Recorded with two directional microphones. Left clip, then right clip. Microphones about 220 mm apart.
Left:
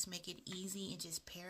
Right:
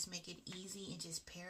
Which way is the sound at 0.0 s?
50° left (ahead or behind).